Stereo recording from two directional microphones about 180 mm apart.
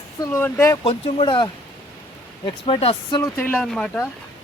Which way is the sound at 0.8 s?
30° left (ahead or behind).